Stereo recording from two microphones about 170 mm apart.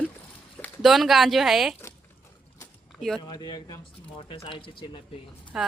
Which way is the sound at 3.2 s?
25° left (ahead or behind).